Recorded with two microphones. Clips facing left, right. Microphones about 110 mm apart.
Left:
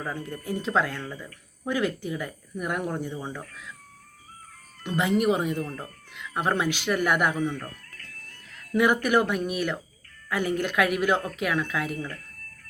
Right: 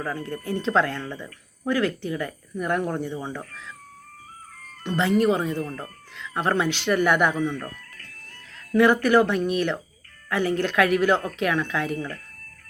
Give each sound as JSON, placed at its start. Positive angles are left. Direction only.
{"t": 0.0, "sound": "speech", "side_deg": 15}
{"t": 4.9, "sound": "speech", "side_deg": 15}
{"t": 8.7, "sound": "a woman's voice", "side_deg": 10}